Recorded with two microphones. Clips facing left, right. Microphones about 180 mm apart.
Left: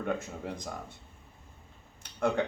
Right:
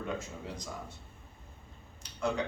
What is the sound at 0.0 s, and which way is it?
Speech, 55° left (ahead or behind).